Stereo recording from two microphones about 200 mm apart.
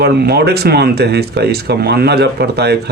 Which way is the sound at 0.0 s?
55° right (ahead or behind).